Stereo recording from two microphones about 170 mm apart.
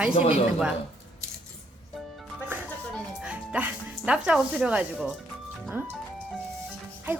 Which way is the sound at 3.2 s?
10° right (ahead or behind).